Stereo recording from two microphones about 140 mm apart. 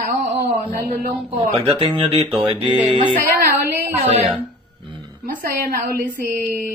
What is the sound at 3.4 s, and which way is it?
Speech, 90° right.